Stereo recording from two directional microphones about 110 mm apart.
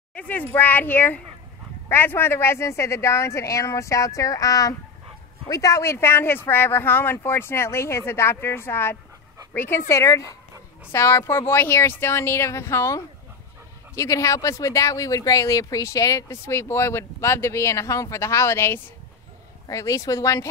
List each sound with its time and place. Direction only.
0.1 s speech: 15° left (ahead or behind); by 20.4 s 30° left (ahead or behind)